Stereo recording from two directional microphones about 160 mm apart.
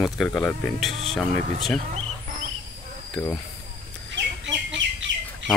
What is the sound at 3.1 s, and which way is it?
Speech, 20° left (ahead or behind).